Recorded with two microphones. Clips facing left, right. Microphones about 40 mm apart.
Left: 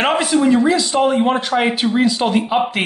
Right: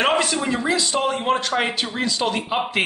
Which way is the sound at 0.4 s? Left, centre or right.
Centre.